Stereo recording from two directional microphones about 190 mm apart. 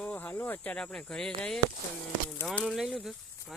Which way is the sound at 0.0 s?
5° left (ahead or behind).